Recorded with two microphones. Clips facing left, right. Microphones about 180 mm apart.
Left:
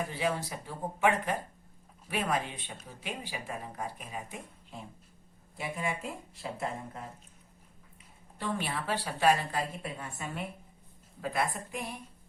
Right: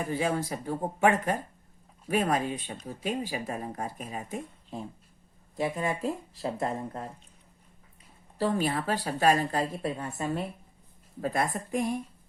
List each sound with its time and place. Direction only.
0.1 s speech: 45° right (ahead or behind)
8.4 s speech: 40° right (ahead or behind)